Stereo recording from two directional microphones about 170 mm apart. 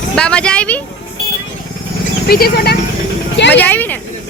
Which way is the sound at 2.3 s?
65° left (ahead or behind).